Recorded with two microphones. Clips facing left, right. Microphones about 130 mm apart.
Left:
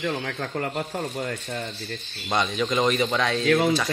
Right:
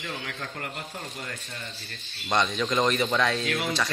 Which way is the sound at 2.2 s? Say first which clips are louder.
Left 1 dB; 5° left (ahead or behind).